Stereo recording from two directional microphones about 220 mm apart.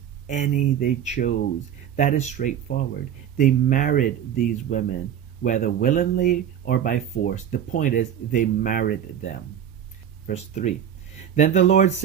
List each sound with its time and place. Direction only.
0.3 s speech: 35° left (ahead or behind)
10.2 s speech: 30° left (ahead or behind)